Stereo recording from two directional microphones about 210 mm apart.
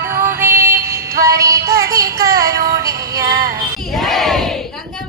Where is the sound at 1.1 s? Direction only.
45° right (ahead or behind).